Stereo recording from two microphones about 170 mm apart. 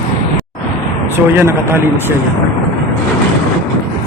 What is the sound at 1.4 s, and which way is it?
Speech, 15° right (ahead or behind).